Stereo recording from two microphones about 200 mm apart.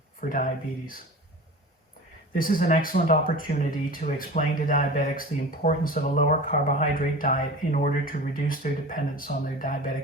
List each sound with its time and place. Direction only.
0.2 s speech: 45° left (ahead or behind)
2.3 s speech: 45° left (ahead or behind)